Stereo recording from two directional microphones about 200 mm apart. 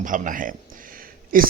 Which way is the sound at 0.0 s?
40° right (ahead or behind).